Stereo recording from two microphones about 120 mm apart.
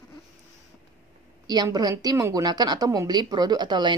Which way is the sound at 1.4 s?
35° right (ahead or behind).